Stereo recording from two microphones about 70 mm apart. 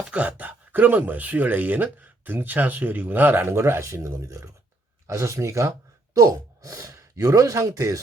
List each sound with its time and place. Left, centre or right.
0.1 s speech: right